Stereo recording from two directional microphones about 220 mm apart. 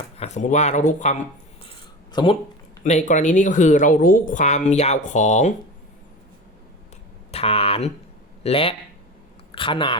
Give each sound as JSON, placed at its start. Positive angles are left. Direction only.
{"t": 0.2, "sound": "speech", "side_deg": 30}
{"t": 2.1, "sound": "speech", "side_deg": 20}
{"t": 2.8, "sound": "speech", "side_deg": 35}
{"t": 7.3, "sound": "speech", "side_deg": 25}